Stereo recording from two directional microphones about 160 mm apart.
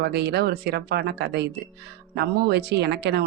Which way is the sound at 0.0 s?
90° right.